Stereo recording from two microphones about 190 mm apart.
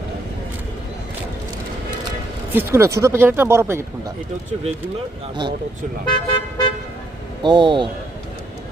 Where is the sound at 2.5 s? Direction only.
10° right (ahead or behind).